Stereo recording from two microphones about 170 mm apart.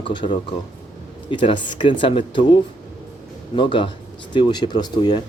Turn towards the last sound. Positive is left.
turn(degrees=25)  # may be behind; listen again after turning